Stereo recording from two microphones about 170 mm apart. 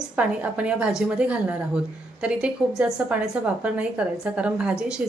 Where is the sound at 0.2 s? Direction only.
10° right (ahead or behind).